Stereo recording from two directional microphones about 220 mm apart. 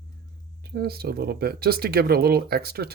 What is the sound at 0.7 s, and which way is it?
Speech, 45° right (ahead or behind).